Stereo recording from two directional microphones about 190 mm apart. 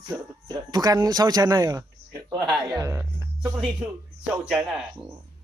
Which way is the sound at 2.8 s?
15° right (ahead or behind).